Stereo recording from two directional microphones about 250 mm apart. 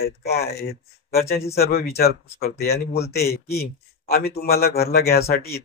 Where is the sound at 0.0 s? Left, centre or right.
Left.